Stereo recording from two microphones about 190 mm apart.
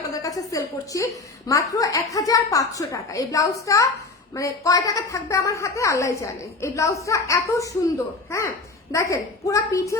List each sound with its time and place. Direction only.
0.1 s a sound: 20° left (ahead or behind)
1.5 s a woman's voice: 15° left (ahead or behind)
8.9 s a woman's voice: 15° left (ahead or behind)